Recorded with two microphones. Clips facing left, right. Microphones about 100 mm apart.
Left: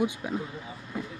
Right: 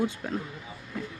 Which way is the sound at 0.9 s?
15° left (ahead or behind).